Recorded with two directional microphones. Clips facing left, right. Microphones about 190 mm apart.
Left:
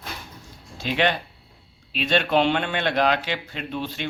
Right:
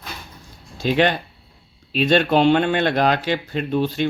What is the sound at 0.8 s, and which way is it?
Speech, 40° right (ahead or behind).